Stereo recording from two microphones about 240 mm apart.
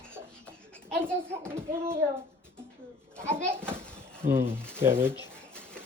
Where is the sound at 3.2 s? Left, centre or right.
Centre.